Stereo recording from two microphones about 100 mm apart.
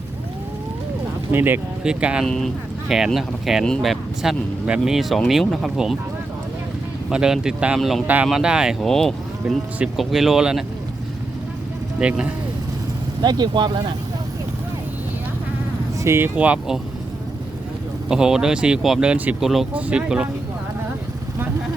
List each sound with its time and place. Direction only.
1.3 s speech: 20° right (ahead or behind)
1.8 s speech: 10° right (ahead or behind)
2.2 s speech: 5° left (ahead or behind)
7.1 s speech: 5° right (ahead or behind)
7.8 s speech: 5° left (ahead or behind)
8.0 s speech: 15° right (ahead or behind)
8.8 s speech: 5° left (ahead or behind)
11.9 s speech: 10° right (ahead or behind)
13.2 s speech: 45° right (ahead or behind)
16.0 s speech: 25° right (ahead or behind)
16.3 s speech: 15° right (ahead or behind)
18.1 s speech: 5° right (ahead or behind)
19.4 s speech: centre (ahead or behind)